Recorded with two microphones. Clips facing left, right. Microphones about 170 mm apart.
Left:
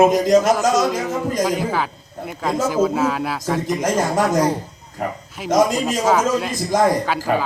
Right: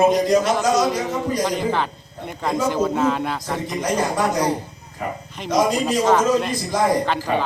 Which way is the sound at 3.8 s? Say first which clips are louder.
Left 1 dB; 45° left (ahead or behind).